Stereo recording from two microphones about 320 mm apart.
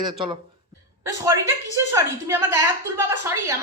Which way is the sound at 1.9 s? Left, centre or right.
Centre.